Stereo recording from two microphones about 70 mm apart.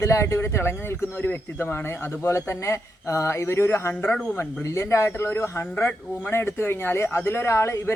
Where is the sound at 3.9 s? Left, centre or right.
Left.